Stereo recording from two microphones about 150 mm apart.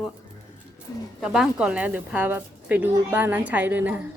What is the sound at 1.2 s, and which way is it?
A woman's voice, 5° right (ahead or behind).